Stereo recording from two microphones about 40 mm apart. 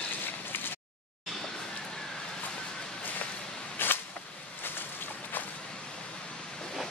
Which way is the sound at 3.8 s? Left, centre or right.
Left.